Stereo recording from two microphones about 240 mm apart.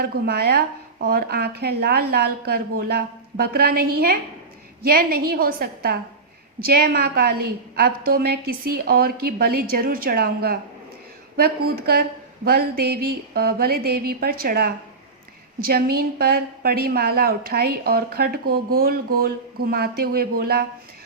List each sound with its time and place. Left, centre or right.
0.0 s a woman's voice: right